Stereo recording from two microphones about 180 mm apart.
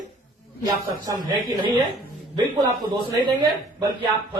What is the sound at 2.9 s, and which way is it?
Speech, 25° right (ahead or behind).